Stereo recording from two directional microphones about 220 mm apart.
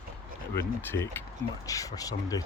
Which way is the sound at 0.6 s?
10° left (ahead or behind).